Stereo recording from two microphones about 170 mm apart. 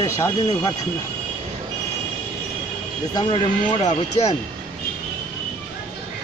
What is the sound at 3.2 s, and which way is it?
Speech, 30° left (ahead or behind).